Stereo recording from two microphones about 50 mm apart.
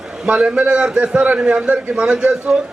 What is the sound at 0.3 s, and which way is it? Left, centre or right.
A man's voice, right.